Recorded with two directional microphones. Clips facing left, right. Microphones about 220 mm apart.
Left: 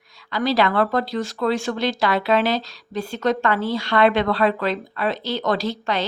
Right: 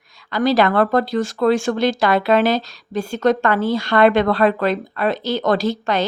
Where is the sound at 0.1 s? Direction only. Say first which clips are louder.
Right 4 dB; 45° right (ahead or behind).